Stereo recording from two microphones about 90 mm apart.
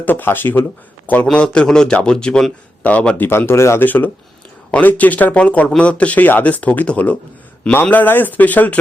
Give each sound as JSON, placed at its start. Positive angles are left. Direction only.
{"t": 0.0, "sound": "speech", "side_deg": 20}
{"t": 3.2, "sound": "speech", "side_deg": 25}